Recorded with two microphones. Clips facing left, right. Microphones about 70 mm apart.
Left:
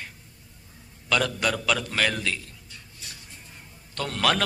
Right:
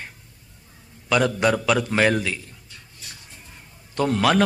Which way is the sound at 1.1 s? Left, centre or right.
Right.